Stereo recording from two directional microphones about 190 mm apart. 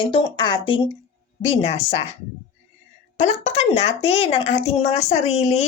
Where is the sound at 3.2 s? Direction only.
35° left (ahead or behind).